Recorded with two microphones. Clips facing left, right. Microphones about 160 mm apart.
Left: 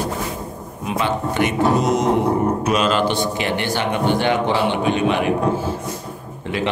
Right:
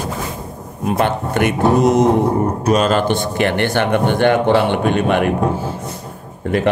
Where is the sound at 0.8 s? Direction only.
55° right (ahead or behind).